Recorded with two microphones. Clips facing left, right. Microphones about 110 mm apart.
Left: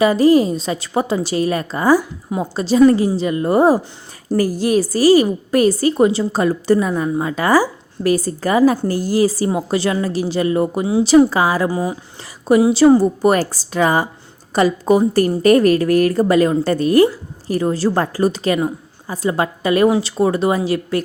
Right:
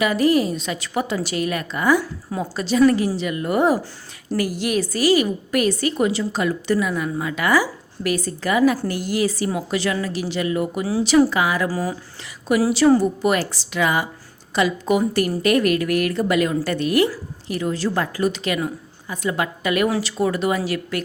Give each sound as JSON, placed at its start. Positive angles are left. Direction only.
{"t": 0.0, "sound": "a woman's voice", "side_deg": 30}
{"t": 11.7, "sound": "a woman's voice", "side_deg": 20}